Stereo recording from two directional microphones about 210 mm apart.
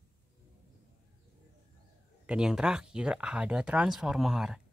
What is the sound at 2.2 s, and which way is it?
Speech, 5° right (ahead or behind).